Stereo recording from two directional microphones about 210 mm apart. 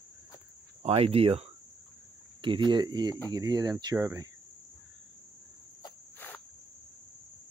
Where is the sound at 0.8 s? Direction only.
30° right (ahead or behind).